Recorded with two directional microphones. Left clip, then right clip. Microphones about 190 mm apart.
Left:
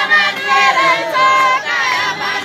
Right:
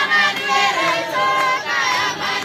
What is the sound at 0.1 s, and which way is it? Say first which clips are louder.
Singing: left 4 dB; 55° right (ahead or behind).